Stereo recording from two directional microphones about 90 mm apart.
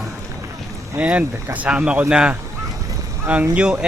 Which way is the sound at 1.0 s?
15° right (ahead or behind).